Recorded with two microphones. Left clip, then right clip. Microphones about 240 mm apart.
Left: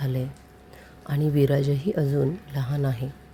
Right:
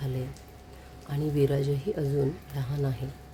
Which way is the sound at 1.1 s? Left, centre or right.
Left.